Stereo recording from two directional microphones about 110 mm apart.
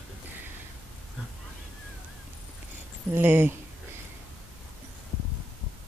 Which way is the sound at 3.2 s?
20° right (ahead or behind).